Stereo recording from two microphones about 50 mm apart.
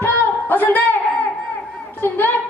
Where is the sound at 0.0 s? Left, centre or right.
Left.